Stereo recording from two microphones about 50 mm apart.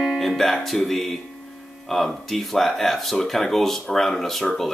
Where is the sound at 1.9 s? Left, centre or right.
Centre.